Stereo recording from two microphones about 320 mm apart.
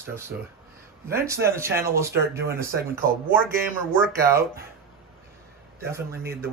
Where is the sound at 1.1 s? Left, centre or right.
Centre.